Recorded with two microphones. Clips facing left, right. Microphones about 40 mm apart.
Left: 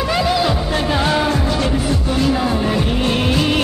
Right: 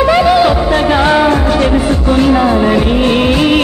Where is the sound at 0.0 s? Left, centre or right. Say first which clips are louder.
Right 9 dB; right.